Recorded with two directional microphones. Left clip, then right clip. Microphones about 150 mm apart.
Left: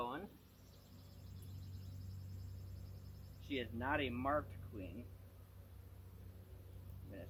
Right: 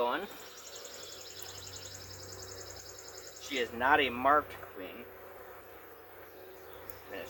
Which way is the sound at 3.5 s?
35° right (ahead or behind).